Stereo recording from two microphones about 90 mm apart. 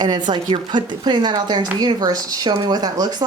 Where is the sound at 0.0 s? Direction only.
50° right (ahead or behind).